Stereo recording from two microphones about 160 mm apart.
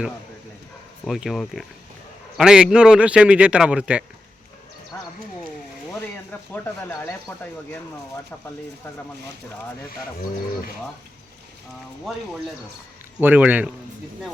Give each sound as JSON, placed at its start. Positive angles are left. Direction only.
{"t": 1.0, "sound": "speech", "side_deg": 0}
{"t": 4.9, "sound": "a sound", "side_deg": 15}
{"t": 6.5, "sound": "speech", "side_deg": 15}
{"t": 13.2, "sound": "speech", "side_deg": -10}